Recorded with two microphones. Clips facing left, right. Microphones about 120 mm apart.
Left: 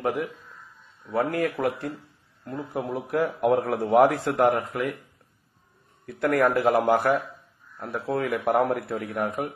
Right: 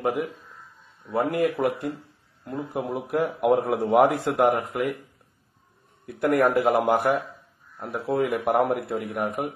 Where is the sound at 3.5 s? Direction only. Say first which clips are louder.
Right 2 dB; 25° right (ahead or behind).